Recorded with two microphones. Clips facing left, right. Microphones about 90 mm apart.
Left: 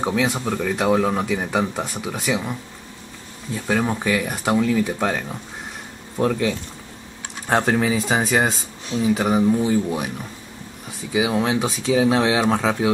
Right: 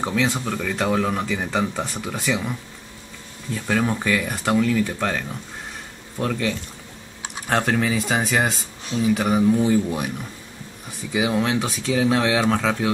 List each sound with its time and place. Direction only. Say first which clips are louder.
0.0 s speech: left 1 dB; 10° left (ahead or behind)
3.5 s speech: left 1 dB; 10° left (ahead or behind)
11.1 s speech: left 1 dB; 15° left (ahead or behind)